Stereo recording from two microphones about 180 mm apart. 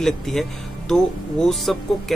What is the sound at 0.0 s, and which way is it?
Speech, centre (ahead or behind).